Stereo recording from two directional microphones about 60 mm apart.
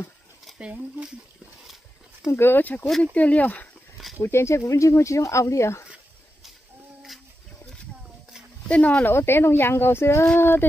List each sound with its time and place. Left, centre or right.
0.6 s speech: centre
2.3 s speech: left
2.6 s speech: left
4.2 s speech: left
8.6 s speech: left
9.0 s speech: left